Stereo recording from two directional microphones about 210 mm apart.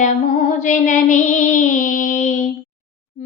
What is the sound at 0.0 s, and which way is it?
Female singing, 35° left (ahead or behind).